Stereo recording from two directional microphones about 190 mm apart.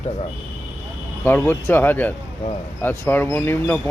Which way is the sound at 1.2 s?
10° left (ahead or behind).